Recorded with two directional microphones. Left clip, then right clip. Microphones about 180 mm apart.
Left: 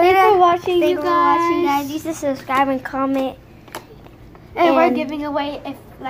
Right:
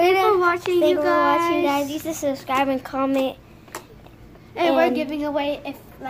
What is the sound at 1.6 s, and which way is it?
A child's voice, 15° right (ahead or behind).